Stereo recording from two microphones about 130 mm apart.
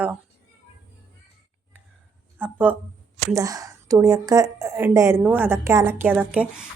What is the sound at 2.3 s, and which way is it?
Speech, 15° right (ahead or behind).